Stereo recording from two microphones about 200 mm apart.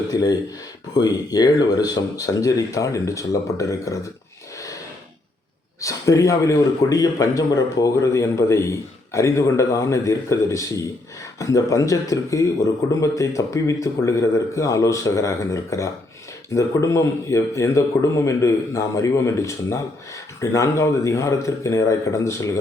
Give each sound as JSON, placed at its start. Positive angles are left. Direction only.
{"t": 0.1, "sound": "a man's voice", "side_deg": 20}
{"t": 5.8, "sound": "a man's voice", "side_deg": 15}